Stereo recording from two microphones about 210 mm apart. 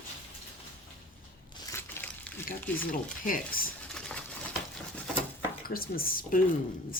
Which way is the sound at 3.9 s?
5° left (ahead or behind).